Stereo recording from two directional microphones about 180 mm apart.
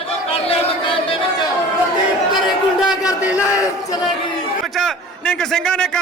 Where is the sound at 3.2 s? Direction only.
10° right (ahead or behind).